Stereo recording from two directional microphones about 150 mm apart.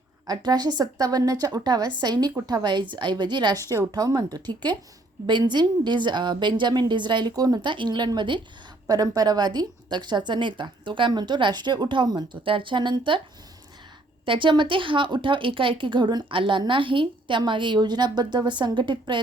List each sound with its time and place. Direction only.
0.3 s a woman's voice: 25° right (ahead or behind)
14.3 s a woman's voice: 35° right (ahead or behind)